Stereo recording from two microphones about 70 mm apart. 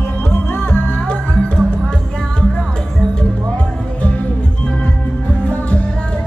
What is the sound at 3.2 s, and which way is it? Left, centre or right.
Music, centre.